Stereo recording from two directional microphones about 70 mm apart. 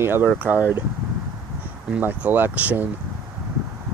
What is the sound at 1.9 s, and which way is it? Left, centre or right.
Speech, right.